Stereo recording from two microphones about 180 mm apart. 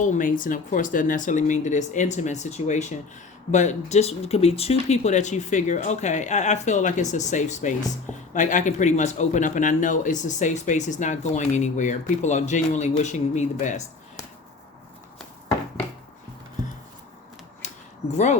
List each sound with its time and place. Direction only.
0.0 s speech: 45° left (ahead or behind)
18.1 s speech: 40° left (ahead or behind)